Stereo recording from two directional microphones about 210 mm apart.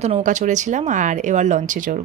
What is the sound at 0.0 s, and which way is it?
Speech, 35° right (ahead or behind).